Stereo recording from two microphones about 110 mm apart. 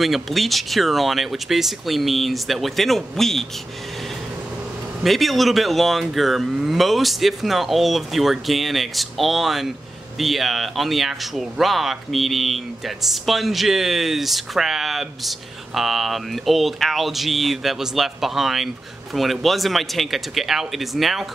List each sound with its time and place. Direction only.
0.0 s speech: centre (ahead or behind)
5.0 s speech: centre (ahead or behind)